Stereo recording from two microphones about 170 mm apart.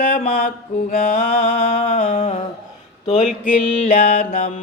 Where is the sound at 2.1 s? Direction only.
50° left (ahead or behind).